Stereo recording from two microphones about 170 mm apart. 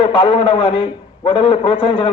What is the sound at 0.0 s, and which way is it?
A man's voice, 35° left (ahead or behind).